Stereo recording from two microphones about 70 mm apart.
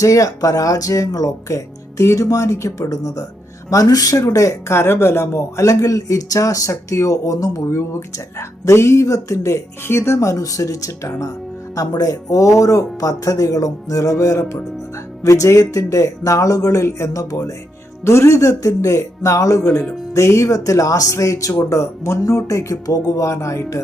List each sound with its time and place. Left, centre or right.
0.0 s speech: left